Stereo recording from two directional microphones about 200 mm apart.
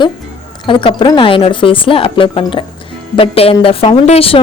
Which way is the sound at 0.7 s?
25° left (ahead or behind).